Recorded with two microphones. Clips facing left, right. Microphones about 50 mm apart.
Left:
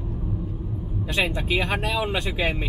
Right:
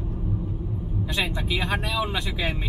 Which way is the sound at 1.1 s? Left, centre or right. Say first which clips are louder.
Left 4 dB; left.